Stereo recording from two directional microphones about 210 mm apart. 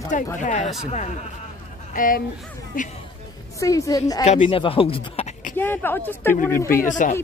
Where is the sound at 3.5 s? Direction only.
15° left (ahead or behind).